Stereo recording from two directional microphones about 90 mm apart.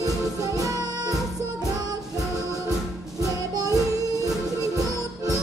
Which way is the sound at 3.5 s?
40° right (ahead or behind).